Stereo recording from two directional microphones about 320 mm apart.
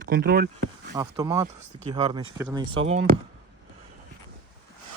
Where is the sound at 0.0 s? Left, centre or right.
Right.